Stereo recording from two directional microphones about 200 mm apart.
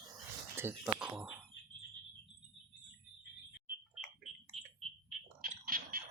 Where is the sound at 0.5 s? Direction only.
10° right (ahead or behind).